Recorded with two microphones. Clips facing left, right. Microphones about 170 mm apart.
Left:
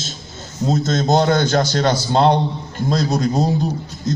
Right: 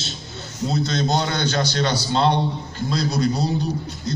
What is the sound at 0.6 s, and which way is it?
A man's voice, 45° left (ahead or behind).